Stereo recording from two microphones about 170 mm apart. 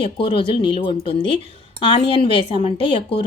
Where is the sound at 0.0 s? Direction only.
30° left (ahead or behind).